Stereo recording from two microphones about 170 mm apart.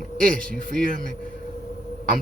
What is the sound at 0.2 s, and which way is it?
Speech, 55° right (ahead or behind).